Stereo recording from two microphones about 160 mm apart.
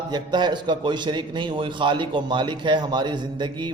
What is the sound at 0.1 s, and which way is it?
A man's voice, 25° right (ahead or behind).